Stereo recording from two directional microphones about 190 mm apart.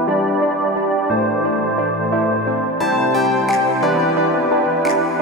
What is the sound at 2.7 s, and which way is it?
Music, centre (ahead or behind).